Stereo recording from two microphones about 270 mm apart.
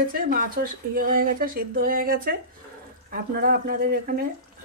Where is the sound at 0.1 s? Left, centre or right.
Right.